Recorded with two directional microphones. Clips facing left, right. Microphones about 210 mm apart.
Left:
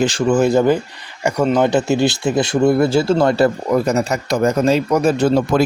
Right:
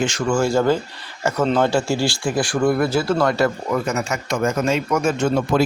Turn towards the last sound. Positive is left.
turn(degrees=35)  # may be behind; listen again after turning